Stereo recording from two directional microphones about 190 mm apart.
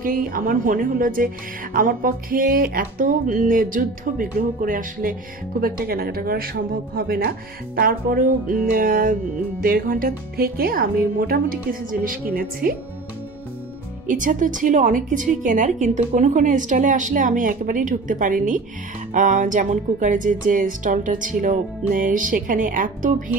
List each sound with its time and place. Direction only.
0.0 s speech: 45° right (ahead or behind)
14.0 s speech: 45° right (ahead or behind)